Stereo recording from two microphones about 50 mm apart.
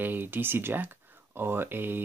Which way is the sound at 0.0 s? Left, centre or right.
Right.